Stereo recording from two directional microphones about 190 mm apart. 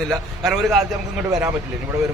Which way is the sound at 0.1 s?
Centre (ahead or behind).